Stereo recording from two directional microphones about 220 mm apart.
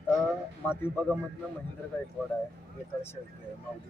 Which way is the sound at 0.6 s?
10° left (ahead or behind).